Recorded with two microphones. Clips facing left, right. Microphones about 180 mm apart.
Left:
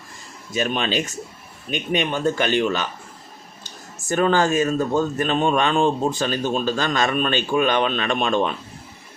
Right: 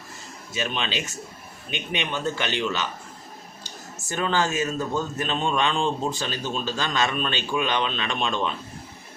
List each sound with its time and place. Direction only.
0.5 s speech: 50° left (ahead or behind)
4.1 s speech: 50° left (ahead or behind)